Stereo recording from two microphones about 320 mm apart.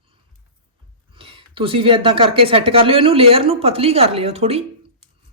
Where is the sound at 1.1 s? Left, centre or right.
Centre.